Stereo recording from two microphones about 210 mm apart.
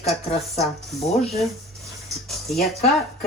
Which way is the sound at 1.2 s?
Centre (ahead or behind).